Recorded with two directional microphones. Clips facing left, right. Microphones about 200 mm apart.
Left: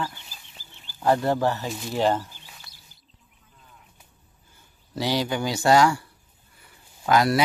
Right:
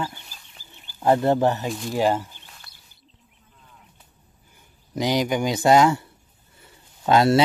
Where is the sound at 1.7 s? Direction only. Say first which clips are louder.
Right 3 dB; centre (ahead or behind).